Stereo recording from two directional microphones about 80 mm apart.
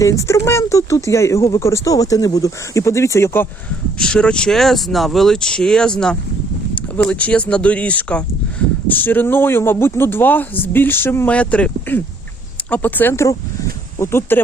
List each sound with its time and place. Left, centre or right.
0.0 s speech: left
3.9 s speech: centre; by 11.3 s left
11.3 s speech: centre